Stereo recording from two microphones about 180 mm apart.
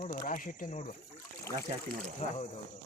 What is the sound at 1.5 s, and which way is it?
Speech, 15° left (ahead or behind).